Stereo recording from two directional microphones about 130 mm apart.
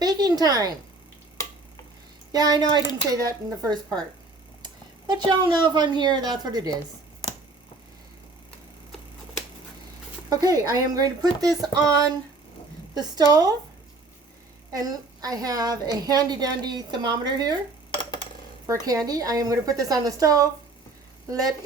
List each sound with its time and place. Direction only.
0.0 s a sound: 30° right (ahead or behind)
2.3 s speech: 30° right (ahead or behind)
10.2 s a woman's voice: 25° right (ahead or behind)
14.7 s a woman's voice: 30° right (ahead or behind)
18.6 s a woman's voice: 25° right (ahead or behind)